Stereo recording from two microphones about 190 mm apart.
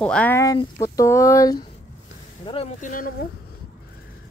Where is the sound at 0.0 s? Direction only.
5° left (ahead or behind).